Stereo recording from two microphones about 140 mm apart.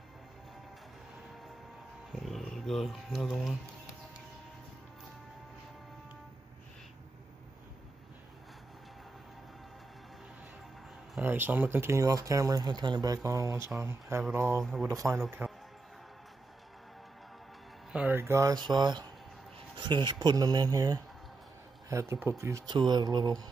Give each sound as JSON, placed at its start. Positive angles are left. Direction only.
{"t": 2.1, "sound": "roaring cats", "side_deg": 0}
{"t": 11.1, "sound": "speech", "side_deg": -15}
{"t": 15.4, "sound": "music", "side_deg": -10}
{"t": 17.9, "sound": "speech", "side_deg": -10}
{"t": 22.8, "sound": "speech", "side_deg": -30}